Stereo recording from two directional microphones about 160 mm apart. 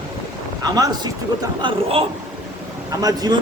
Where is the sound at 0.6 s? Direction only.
25° right (ahead or behind).